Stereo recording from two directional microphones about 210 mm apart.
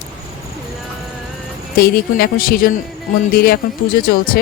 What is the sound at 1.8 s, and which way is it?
Speech, 45° left (ahead or behind).